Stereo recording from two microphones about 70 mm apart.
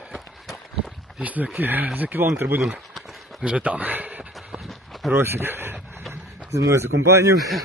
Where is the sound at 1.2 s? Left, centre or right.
Right.